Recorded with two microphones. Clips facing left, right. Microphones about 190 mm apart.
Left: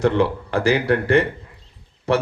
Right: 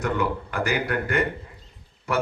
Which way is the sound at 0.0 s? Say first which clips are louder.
Left 7 dB; 30° left (ahead or behind).